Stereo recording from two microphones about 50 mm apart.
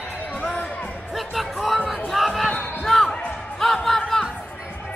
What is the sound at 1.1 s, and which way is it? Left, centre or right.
Music, centre.